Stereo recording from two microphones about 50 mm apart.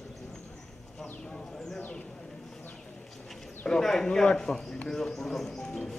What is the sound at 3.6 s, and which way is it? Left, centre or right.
Speech, centre.